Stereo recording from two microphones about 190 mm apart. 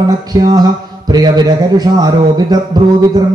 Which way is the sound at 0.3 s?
20° right (ahead or behind).